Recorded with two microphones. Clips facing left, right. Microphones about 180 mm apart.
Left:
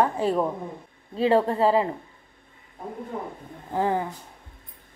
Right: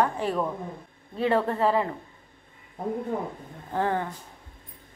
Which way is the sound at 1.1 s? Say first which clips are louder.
Left 4 dB; 35° left (ahead or behind).